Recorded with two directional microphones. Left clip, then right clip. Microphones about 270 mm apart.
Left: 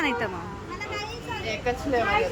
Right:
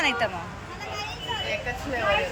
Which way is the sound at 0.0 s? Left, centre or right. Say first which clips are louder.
Right 2 dB; centre.